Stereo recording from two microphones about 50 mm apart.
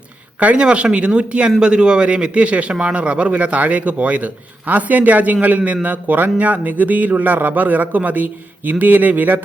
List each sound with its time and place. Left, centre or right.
0.3 s a man's voice: right